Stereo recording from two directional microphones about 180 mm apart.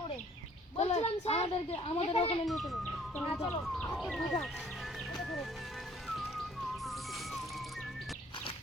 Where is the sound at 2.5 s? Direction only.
Centre (ahead or behind).